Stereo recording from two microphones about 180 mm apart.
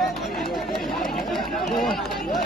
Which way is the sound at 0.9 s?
Centre (ahead or behind).